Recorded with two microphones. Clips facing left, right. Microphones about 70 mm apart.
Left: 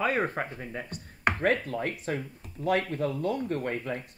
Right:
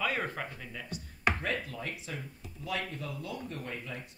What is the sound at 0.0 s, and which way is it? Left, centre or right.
Speech, left.